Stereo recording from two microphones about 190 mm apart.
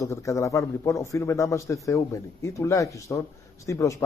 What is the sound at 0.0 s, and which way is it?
Speech, 15° left (ahead or behind).